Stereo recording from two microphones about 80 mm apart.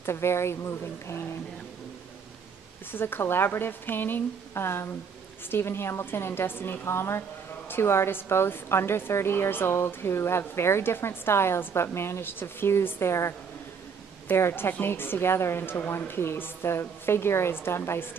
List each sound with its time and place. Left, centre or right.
0.0 s a woman's voice: left
2.9 s a woman's voice: left